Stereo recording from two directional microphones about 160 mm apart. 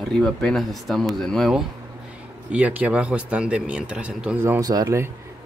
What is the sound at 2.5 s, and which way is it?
Speech, 10° right (ahead or behind).